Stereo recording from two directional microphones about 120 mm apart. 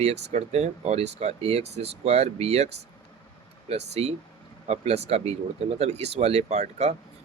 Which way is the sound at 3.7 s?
60° right (ahead or behind).